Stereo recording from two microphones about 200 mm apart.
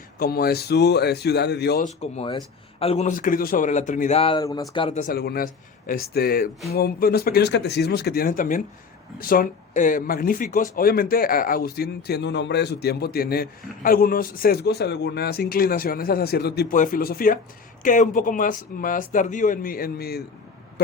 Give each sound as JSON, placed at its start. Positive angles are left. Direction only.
{"t": 0.2, "sound": "speech", "side_deg": 50}
{"t": 1.8, "sound": "speech", "side_deg": 30}
{"t": 4.2, "sound": "speech", "side_deg": 25}
{"t": 5.0, "sound": "speech", "side_deg": 50}